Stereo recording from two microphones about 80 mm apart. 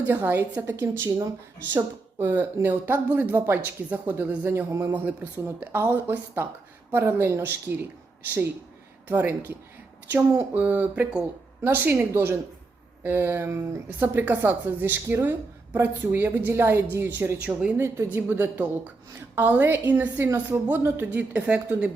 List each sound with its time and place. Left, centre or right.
0.7 s a woman's voice: right
9.0 s a woman's voice: right
21.1 s a woman's voice: centre